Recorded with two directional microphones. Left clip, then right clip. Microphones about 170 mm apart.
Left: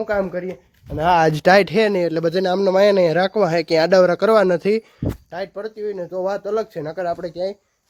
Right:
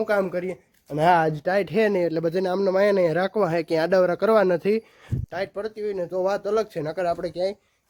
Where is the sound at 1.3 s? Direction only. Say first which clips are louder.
Left 11 dB; 45° left (ahead or behind).